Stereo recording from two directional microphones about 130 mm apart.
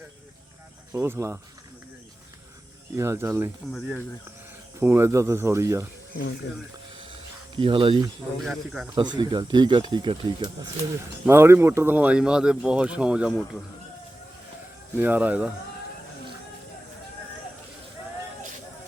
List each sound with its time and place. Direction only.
0.9 s speech: 20° right (ahead or behind)
2.9 s speech: 20° right (ahead or behind)
3.7 s a man's voice: centre (ahead or behind)
4.8 s speech: 20° right (ahead or behind)
7.5 s speech: 40° right (ahead or behind)
8.4 s a man's voice: centre (ahead or behind)
9.0 s speech: 35° right (ahead or behind)
11.3 s speech: 20° right (ahead or behind)
14.9 s speech: 15° right (ahead or behind)